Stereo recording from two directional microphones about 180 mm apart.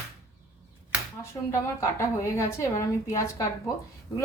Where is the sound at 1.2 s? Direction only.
15° left (ahead or behind).